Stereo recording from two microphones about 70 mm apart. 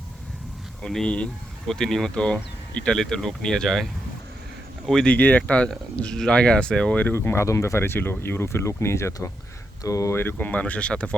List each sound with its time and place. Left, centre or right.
0.8 s speech: centre
5.0 s speech: left
7.1 s speech: left
10.2 s speech: left